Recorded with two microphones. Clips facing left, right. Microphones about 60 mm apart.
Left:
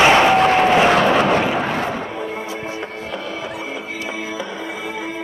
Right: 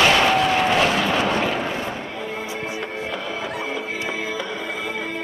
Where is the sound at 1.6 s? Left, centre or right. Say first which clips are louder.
Left 5 dB; left.